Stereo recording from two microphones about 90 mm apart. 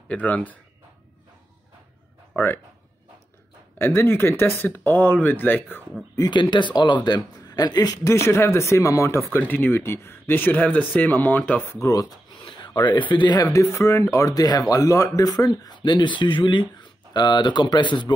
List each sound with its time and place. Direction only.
0.1 s speech: 15° left (ahead or behind)
2.3 s speech: 25° left (ahead or behind)
3.7 s speech: 25° left (ahead or behind)
6.3 s a man's voice: 60° left (ahead or behind)
8.0 s speech: 30° left (ahead or behind)
9.3 s speech: 20° left (ahead or behind)
11.7 s speech: 40° left (ahead or behind)
12.4 s speech: 55° left (ahead or behind)
13.4 s speech: 35° left (ahead or behind); by 18.1 s 55° left (ahead or behind)